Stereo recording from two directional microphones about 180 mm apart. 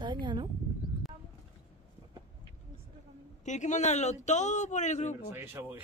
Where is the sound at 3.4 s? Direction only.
40° left (ahead or behind).